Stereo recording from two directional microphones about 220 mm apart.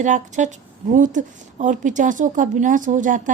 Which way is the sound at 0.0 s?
35° right (ahead or behind).